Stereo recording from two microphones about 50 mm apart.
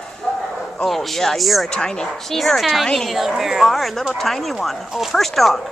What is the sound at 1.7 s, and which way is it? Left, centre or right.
Speech, centre.